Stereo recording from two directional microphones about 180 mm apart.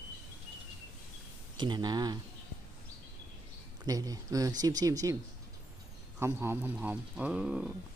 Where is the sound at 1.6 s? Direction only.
25° right (ahead or behind).